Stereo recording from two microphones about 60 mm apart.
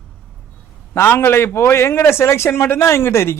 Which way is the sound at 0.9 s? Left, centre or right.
Left.